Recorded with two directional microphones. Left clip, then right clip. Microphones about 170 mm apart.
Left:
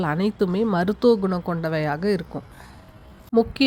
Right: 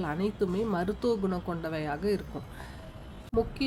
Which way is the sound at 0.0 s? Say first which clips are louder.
Left 7 dB; 40° left (ahead or behind).